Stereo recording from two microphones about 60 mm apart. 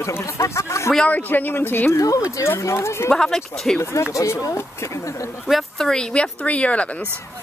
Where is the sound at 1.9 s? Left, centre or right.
Left.